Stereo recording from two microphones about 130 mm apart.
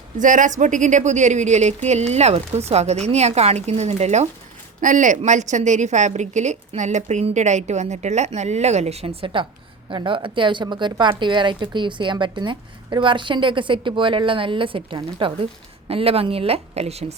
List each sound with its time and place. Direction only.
0.2 s a woman's voice: 80° right; by 4.3 s 60° right (ahead or behind)
4.8 s a woman's voice: 80° right; by 17.2 s 55° right (ahead or behind)